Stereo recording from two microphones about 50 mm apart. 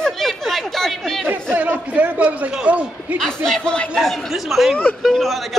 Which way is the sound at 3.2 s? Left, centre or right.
Centre.